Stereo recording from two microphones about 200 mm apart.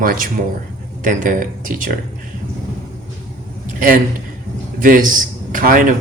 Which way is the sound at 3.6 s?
40° right (ahead or behind).